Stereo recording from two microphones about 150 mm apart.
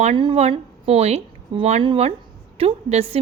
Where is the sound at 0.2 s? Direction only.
40° right (ahead or behind).